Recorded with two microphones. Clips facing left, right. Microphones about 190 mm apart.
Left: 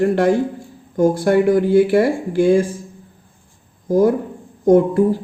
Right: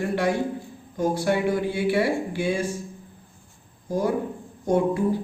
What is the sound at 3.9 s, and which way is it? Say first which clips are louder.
Speech: left 9 dB; 45° left (ahead or behind).